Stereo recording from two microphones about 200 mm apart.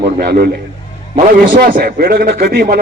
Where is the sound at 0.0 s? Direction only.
50° right (ahead or behind).